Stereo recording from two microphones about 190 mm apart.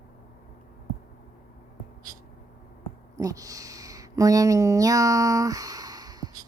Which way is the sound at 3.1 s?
20° right (ahead or behind).